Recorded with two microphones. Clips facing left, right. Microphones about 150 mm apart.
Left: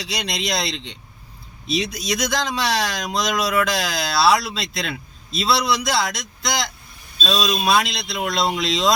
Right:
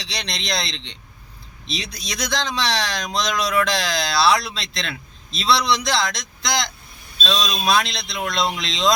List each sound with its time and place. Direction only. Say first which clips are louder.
0.0 s speech: left 4 dB; 5° left (ahead or behind)